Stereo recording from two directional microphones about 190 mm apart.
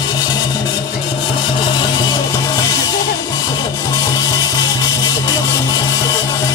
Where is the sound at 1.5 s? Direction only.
25° left (ahead or behind).